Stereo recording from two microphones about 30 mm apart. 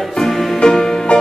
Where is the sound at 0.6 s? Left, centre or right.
Left.